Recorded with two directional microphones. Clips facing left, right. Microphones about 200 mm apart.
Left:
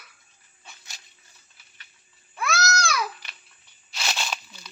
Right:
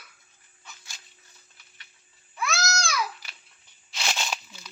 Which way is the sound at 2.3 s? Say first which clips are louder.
Left 3 dB; 60° left (ahead or behind).